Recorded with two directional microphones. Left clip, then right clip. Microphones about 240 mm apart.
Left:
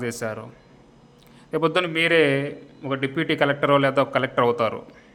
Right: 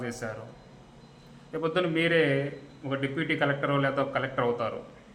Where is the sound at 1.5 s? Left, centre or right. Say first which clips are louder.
Left 6 dB; left.